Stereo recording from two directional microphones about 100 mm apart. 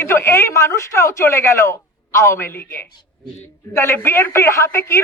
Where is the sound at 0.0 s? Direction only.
25° left (ahead or behind).